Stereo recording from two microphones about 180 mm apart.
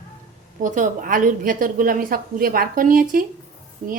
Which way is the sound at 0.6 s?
45° right (ahead or behind).